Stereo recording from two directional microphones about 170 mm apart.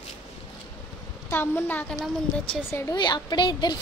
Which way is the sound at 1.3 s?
10° left (ahead or behind).